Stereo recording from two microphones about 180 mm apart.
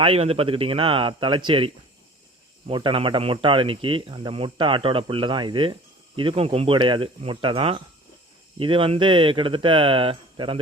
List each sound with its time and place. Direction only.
0.0 s speech: 35° right (ahead or behind)